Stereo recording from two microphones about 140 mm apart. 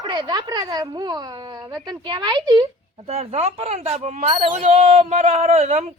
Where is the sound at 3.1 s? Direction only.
50° right (ahead or behind).